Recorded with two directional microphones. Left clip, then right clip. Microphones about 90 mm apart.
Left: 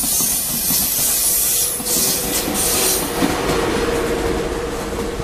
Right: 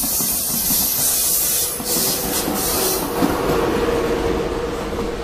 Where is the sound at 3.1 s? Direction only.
30° left (ahead or behind).